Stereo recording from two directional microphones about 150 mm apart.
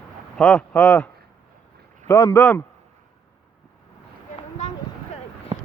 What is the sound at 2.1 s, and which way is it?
Speech, 15° left (ahead or behind).